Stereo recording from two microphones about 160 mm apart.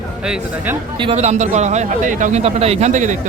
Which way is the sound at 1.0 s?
40° right (ahead or behind).